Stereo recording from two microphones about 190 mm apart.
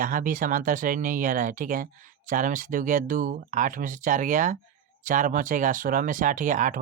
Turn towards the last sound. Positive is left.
turn(degrees=-40)  # may be behind; listen again after turning